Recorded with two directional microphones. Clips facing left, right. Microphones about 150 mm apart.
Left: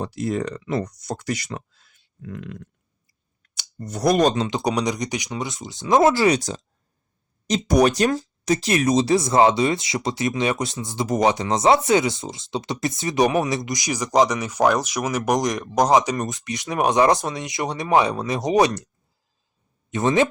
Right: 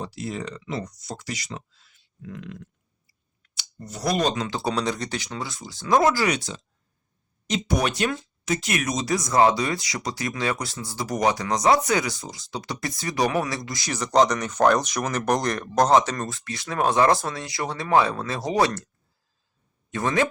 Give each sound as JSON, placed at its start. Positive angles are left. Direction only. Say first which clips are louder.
{"t": 0.0, "sound": "speech", "louder": "left 6 dB", "side_deg": 50}
{"t": 4.4, "sound": "speech", "louder": "left 4 dB", "side_deg": 20}
{"t": 19.9, "sound": "speech", "louder": "left 4 dB", "side_deg": 20}